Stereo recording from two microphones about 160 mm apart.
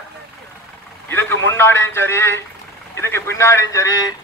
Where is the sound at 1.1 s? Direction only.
15° left (ahead or behind).